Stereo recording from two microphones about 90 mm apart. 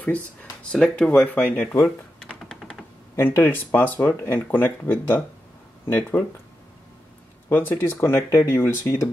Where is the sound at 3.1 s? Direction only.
25° left (ahead or behind).